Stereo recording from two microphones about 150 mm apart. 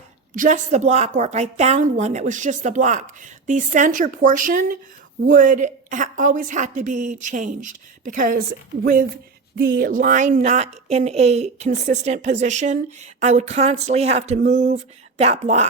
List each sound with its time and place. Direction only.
0.3 s a woman's voice: 60° right (ahead or behind)